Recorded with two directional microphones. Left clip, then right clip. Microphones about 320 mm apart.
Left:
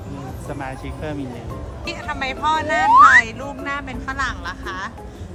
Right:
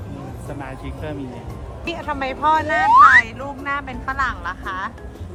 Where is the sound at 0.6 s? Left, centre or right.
Centre.